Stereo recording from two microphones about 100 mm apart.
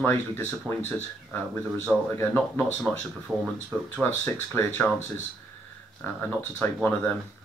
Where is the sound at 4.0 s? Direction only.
20° left (ahead or behind).